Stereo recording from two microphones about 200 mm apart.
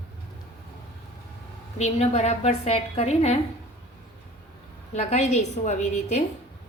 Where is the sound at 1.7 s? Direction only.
30° left (ahead or behind).